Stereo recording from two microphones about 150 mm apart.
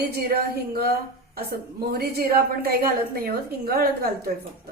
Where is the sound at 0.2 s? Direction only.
85° right.